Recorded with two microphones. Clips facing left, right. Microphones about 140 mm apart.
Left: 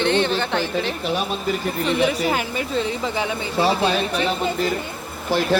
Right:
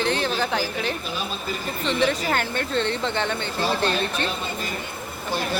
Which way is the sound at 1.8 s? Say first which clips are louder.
Left 2 dB; 5° left (ahead or behind).